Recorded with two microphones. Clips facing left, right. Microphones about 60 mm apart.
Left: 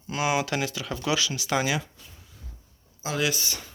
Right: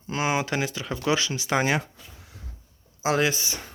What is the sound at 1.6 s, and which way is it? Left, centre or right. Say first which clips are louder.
Speech: right 3 dB; right.